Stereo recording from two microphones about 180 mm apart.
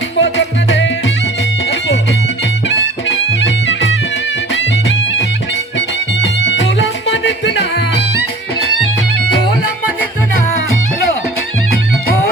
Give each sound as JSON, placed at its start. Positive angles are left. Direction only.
{"t": 0.2, "sound": "music", "side_deg": 90}
{"t": 2.6, "sound": "music", "side_deg": 90}